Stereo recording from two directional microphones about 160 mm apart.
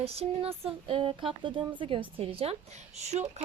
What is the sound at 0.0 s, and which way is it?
Speech, 40° right (ahead or behind).